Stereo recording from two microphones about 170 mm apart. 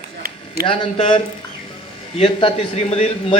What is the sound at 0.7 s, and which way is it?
A man's voice, 30° left (ahead or behind).